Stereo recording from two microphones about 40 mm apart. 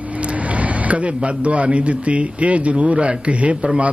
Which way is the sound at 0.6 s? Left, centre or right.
Right.